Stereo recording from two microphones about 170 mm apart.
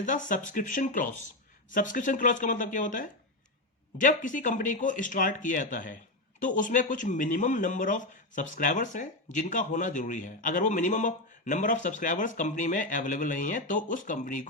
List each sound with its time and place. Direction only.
0.0 s speech: 50° left (ahead or behind)